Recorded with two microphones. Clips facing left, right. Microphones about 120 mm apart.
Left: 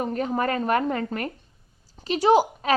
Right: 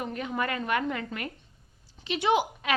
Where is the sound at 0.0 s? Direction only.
40° left (ahead or behind).